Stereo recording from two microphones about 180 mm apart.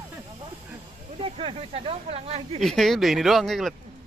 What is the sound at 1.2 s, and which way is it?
Speech, 30° right (ahead or behind).